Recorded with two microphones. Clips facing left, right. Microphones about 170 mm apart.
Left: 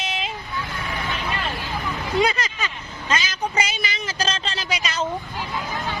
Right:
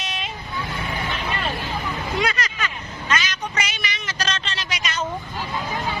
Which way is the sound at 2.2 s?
30° left (ahead or behind).